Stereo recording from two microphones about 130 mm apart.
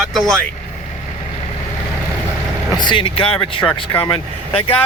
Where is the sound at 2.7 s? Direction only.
35° left (ahead or behind).